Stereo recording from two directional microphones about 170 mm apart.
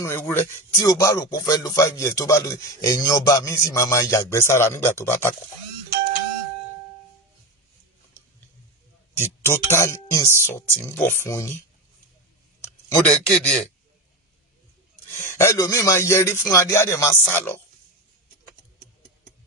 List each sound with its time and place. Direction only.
0.0 s speech: 15° left (ahead or behind)
9.1 s speech: 15° left (ahead or behind)
12.9 s speech: 5° left (ahead or behind)
15.0 s speech: 15° left (ahead or behind)